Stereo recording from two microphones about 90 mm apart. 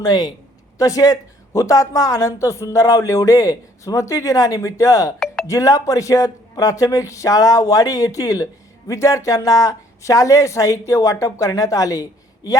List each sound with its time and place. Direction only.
0.0 s a woman's voice: 45° left (ahead or behind)